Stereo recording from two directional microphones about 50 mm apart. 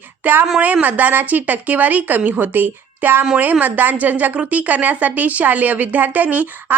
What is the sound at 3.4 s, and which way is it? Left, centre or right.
A woman's voice, right.